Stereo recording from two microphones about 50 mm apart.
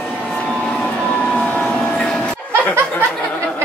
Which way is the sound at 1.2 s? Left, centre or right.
Left.